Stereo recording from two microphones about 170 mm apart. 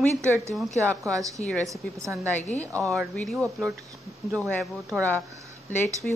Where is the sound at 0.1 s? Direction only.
15° right (ahead or behind).